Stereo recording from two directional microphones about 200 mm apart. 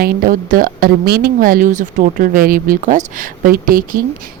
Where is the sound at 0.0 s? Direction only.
45° right (ahead or behind).